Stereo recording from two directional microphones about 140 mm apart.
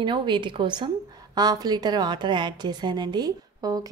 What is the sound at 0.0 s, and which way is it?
A woman's voice, 35° right (ahead or behind).